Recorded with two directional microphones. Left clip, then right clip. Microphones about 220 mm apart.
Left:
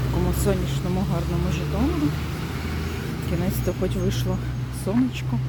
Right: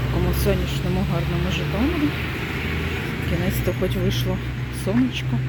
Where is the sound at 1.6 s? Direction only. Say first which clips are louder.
Right 1 dB; 55° left (ahead or behind).